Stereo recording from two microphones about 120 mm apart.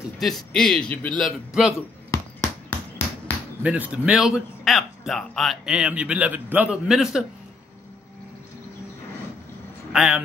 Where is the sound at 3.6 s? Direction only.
10° right (ahead or behind).